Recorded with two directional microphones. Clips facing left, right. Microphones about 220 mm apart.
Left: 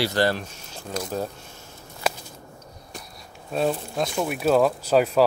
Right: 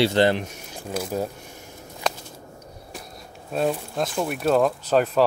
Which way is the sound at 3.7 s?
Centre (ahead or behind).